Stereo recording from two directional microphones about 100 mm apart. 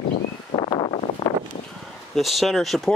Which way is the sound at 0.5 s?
55° left (ahead or behind).